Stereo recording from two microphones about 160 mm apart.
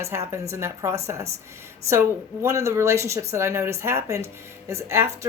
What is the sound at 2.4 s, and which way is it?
Speech, 20° right (ahead or behind).